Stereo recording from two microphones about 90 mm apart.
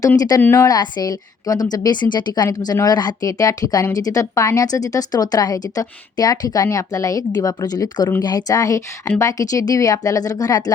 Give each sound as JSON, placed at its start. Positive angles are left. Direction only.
{"t": 0.2, "sound": "a woman's voice", "side_deg": 45}
{"t": 0.4, "sound": "speech", "side_deg": 30}
{"t": 0.7, "sound": "a woman's voice", "side_deg": 50}